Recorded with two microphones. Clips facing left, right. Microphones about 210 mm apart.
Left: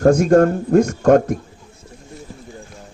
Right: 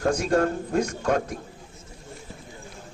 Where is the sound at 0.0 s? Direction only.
45° left (ahead or behind).